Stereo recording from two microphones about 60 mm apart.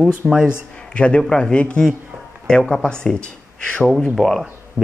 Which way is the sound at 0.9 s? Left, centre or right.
Centre.